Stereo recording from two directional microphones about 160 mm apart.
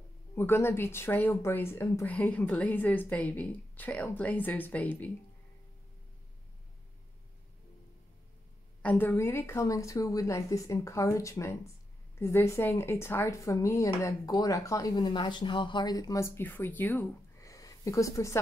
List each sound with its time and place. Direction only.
0.4 s speech: 15° left (ahead or behind)
8.8 s speech: 10° left (ahead or behind)